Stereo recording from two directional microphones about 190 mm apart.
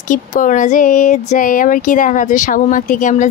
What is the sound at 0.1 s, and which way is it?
Speech, 45° left (ahead or behind).